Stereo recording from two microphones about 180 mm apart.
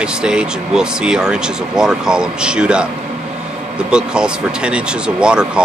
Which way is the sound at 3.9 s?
5° right (ahead or behind).